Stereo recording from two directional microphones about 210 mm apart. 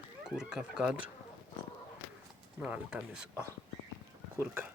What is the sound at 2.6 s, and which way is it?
Speech, 5° right (ahead or behind).